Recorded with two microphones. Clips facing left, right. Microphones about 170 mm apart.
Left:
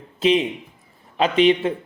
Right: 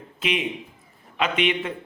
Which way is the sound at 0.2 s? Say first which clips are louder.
Left 8 dB; 30° left (ahead or behind).